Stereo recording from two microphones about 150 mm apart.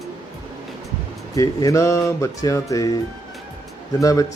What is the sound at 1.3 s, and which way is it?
Speech, 20° left (ahead or behind).